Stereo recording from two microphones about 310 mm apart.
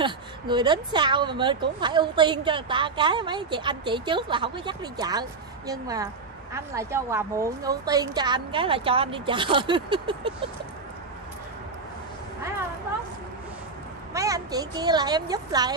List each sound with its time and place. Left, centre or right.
0.0 s a woman's voice: centre
14.1 s a woman's voice: centre